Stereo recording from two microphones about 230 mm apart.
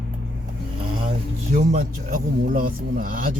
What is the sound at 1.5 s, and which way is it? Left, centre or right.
Speech, right.